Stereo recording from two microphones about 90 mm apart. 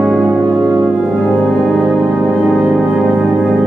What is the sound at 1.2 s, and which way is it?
Music, 5° left (ahead or behind).